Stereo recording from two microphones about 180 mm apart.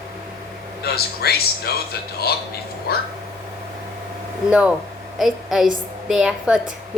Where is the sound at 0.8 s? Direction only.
60° left (ahead or behind).